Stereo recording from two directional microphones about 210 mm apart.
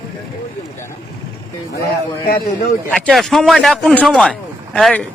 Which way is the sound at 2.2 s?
45° left (ahead or behind).